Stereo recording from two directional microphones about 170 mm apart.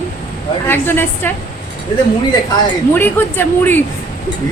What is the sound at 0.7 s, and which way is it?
Speech, 10° left (ahead or behind).